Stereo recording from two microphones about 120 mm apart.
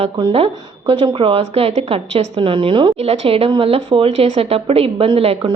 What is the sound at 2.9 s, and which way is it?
Speech, 55° right (ahead or behind).